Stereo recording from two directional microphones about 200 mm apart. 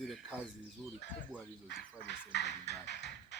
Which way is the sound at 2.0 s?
55° left (ahead or behind).